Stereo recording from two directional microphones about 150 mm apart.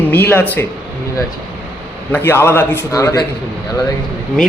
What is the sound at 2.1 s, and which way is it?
Speech, 15° left (ahead or behind).